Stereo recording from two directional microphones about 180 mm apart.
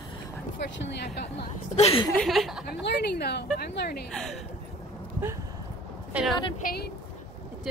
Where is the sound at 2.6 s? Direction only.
65° left (ahead or behind).